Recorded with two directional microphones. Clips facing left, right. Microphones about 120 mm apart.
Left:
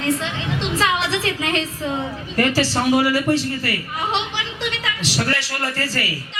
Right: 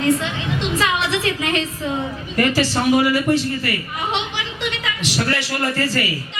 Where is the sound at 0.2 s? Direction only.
30° left (ahead or behind).